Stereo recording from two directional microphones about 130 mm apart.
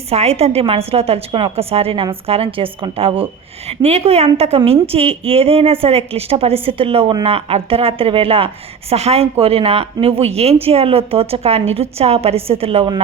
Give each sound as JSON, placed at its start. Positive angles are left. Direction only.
{"t": 0.1, "sound": "a woman's voice", "side_deg": -55}
{"t": 3.7, "sound": "a woman's voice", "side_deg": -55}